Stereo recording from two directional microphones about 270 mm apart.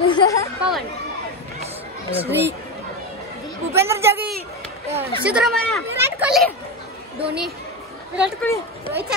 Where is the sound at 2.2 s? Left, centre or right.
Centre.